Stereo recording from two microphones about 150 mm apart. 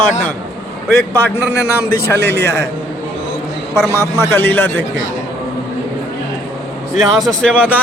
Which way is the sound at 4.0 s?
20° left (ahead or behind).